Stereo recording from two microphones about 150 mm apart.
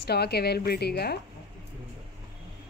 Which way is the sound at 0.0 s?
90° left.